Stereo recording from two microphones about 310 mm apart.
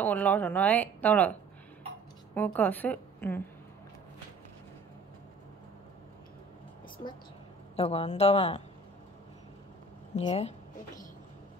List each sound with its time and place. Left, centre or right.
0.0 s speech: centre
2.3 s speech: centre
7.7 s a woman's voice: centre
10.1 s a woman's voice: centre